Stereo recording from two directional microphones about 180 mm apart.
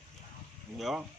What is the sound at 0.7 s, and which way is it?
Speech, centre (ahead or behind).